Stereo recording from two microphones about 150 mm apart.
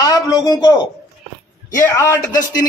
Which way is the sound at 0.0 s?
25° left (ahead or behind).